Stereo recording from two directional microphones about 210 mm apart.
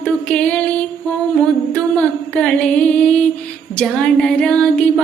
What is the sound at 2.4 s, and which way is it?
Music, 5° left (ahead or behind).